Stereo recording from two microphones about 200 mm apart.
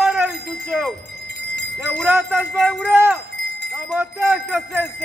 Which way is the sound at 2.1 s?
10° right (ahead or behind).